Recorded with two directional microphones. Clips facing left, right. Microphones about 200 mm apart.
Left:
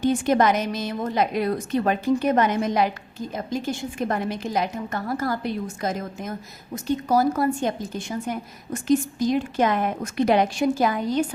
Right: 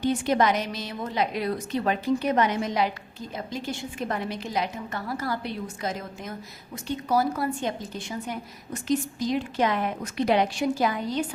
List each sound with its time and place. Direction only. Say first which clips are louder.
0.0 s a woman's voice: left 3 dB; 50° left (ahead or behind)